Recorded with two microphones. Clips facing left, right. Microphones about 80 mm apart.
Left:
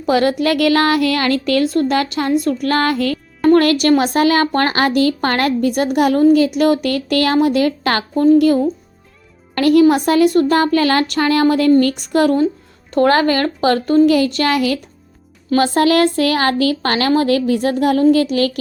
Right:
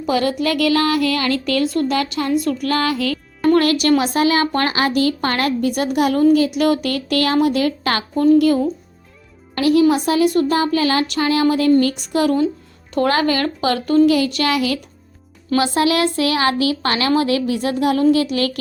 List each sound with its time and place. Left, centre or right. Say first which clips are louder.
0.1 s a woman's voice: left 4 dB; left
9.6 s a woman's voice: left 3 dB; left